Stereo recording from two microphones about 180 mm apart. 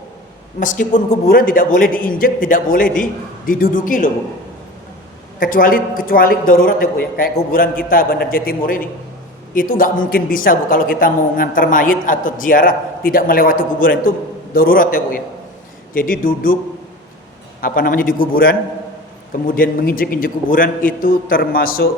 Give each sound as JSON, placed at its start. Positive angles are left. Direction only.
{"t": 0.6, "sound": "a woman's voice", "side_deg": 45}
{"t": 5.4, "sound": "a woman's voice", "side_deg": 50}
{"t": 16.2, "sound": "a woman's voice", "side_deg": 50}
{"t": 17.6, "sound": "a woman's voice", "side_deg": 50}
{"t": 19.5, "sound": "a woman's voice", "side_deg": 50}